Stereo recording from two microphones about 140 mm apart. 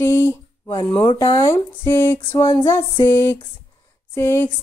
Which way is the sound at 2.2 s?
20° left (ahead or behind).